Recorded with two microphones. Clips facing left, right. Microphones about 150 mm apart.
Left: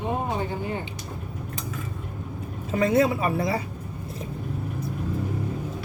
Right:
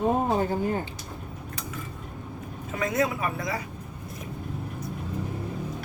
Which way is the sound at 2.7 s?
30° left (ahead or behind).